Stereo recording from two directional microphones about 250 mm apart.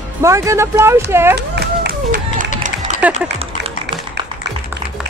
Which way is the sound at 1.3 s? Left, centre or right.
Right.